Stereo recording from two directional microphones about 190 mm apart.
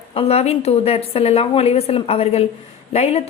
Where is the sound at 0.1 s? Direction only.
30° left (ahead or behind).